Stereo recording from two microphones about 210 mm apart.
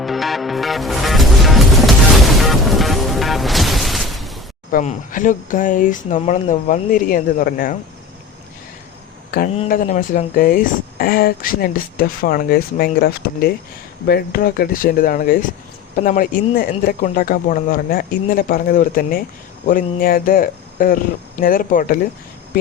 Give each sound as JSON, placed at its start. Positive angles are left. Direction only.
{"t": 0.0, "sound": "music", "side_deg": 0}
{"t": 4.7, "sound": "speech", "side_deg": 40}
{"t": 9.6, "sound": "speech", "side_deg": 40}